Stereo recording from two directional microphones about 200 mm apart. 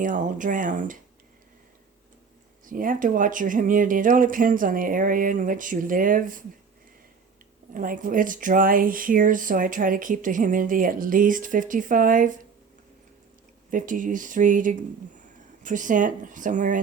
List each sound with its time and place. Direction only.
0.0 s speech: 40° right (ahead or behind)
2.6 s speech: 40° right (ahead or behind)
7.7 s speech: 45° right (ahead or behind)
13.7 s speech: 40° right (ahead or behind)